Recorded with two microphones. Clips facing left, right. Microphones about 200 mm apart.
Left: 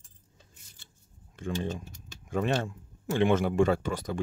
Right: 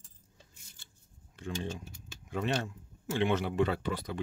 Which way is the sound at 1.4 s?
50° left (ahead or behind).